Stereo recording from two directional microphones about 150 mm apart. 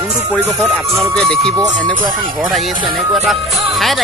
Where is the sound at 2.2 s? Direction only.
30° right (ahead or behind).